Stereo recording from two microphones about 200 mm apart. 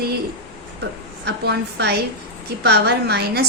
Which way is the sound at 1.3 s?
55° right (ahead or behind).